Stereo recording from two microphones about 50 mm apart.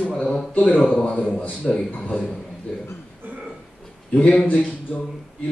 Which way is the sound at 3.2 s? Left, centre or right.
Right.